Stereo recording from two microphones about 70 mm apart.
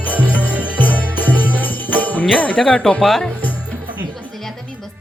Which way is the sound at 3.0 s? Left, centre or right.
Centre.